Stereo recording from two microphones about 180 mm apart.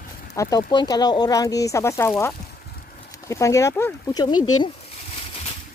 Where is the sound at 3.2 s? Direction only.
15° left (ahead or behind).